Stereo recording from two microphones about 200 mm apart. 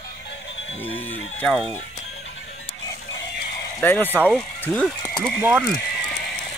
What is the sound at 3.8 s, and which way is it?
Speech, 10° left (ahead or behind).